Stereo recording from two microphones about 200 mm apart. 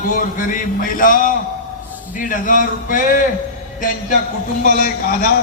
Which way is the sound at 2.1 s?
40° left (ahead or behind).